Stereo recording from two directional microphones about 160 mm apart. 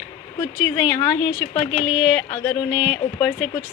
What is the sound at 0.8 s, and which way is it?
A woman's voice, 15° left (ahead or behind).